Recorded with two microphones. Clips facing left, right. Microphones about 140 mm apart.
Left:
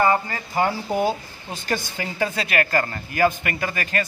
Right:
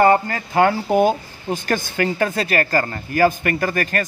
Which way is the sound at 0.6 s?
60° right (ahead or behind).